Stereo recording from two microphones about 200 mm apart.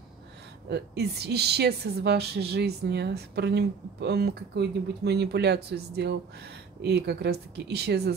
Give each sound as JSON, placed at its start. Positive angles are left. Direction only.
{"t": 0.7, "sound": "a woman's voice", "side_deg": -55}